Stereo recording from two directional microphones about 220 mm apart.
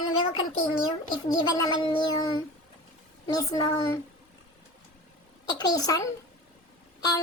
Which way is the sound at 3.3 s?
15° left (ahead or behind).